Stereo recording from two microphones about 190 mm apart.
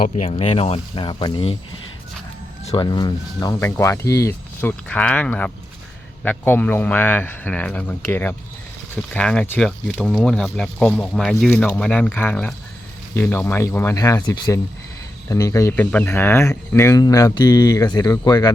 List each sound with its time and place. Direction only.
0.0 s speech: 35° left (ahead or behind)
2.6 s speech: 25° left (ahead or behind)